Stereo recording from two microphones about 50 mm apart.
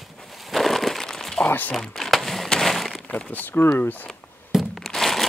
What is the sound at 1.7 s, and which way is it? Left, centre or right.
Speech, centre.